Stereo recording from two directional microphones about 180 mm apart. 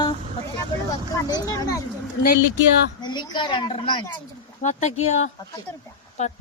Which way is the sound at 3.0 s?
25° left (ahead or behind).